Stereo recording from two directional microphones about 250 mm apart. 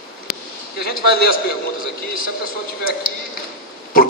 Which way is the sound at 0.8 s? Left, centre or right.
Left.